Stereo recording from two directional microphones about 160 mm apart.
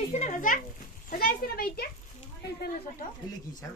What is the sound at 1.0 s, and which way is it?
Speech, 65° left (ahead or behind).